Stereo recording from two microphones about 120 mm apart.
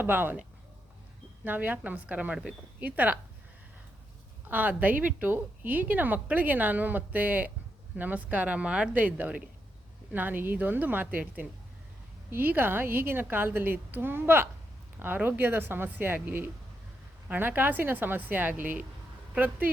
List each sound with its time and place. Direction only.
0.0 s a woman's voice: 15° right (ahead or behind)
1.5 s a woman's voice: 15° right (ahead or behind)
4.4 s a woman's voice: 15° right (ahead or behind)